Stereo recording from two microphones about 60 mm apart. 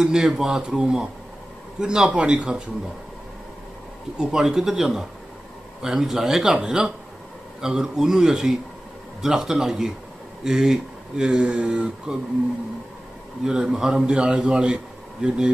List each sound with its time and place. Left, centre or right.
0.0 s speech: centre
4.2 s speech: centre
13.4 s speech: centre